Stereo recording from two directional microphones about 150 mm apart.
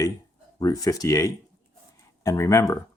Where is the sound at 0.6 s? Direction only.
25° left (ahead or behind).